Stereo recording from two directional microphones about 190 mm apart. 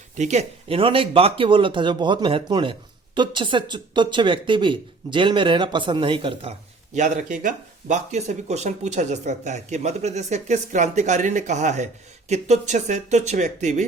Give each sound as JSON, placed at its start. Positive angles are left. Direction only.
{"t": 0.2, "sound": "speech", "side_deg": -35}
{"t": 6.9, "sound": "speech", "side_deg": -40}